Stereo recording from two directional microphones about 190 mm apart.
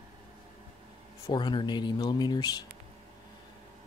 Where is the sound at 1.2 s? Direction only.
25° left (ahead or behind).